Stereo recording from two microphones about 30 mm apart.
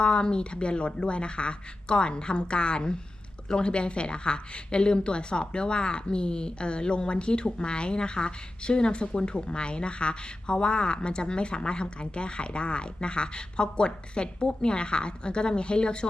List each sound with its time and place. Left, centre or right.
0.0 s speech: left